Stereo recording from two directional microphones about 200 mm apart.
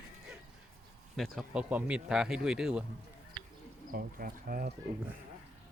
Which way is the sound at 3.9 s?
45° right (ahead or behind).